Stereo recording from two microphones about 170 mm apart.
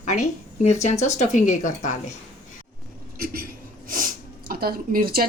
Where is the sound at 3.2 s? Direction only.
60° right (ahead or behind).